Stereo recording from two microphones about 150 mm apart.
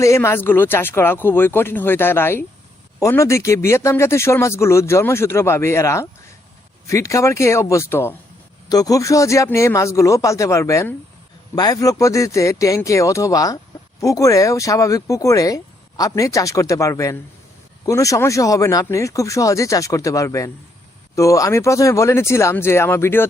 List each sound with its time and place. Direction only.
0.0 s speech: 20° left (ahead or behind)